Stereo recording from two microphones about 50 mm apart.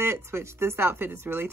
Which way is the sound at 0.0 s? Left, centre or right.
Right.